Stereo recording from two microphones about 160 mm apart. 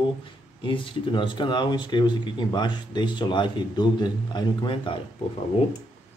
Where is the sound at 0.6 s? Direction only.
30° left (ahead or behind).